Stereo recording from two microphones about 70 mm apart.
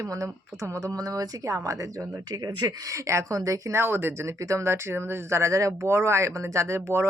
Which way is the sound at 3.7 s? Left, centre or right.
Right.